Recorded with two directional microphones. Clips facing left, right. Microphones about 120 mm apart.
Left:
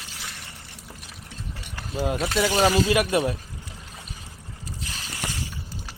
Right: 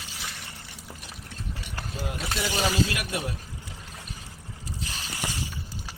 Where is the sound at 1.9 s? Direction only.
90° left.